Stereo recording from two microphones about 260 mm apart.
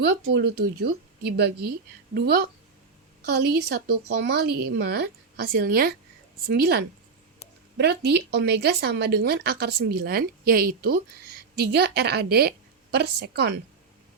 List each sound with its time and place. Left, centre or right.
0.0 s speech: right
2.1 s speech: right